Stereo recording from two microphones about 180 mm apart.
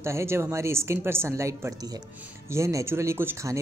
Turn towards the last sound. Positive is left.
turn(degrees=-15)  # may be behind; listen again after turning